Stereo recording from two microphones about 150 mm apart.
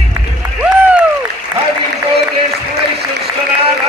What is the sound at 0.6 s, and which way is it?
Music, 10° right (ahead or behind).